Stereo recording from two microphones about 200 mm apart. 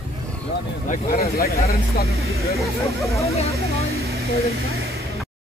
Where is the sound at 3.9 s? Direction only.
50° right (ahead or behind).